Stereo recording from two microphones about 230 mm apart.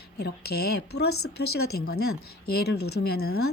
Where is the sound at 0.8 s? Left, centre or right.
Left.